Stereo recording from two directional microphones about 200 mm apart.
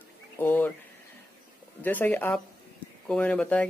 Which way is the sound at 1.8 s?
10° left (ahead or behind).